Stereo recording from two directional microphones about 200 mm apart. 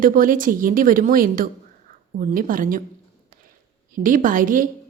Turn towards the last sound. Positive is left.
turn(degrees=-45)  # may be behind; listen again after turning